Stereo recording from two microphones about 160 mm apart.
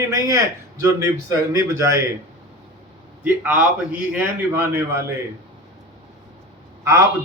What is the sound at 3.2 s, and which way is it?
A man's voice, 10° right (ahead or behind).